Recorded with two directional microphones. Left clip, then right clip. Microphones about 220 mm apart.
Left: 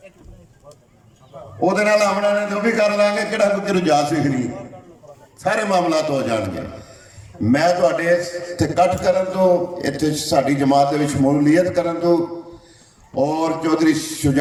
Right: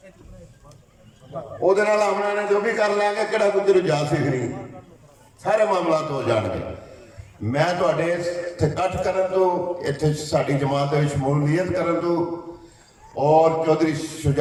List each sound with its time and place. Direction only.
1.6 s a man's voice: 50° left (ahead or behind)
5.4 s a man's voice: 50° left (ahead or behind)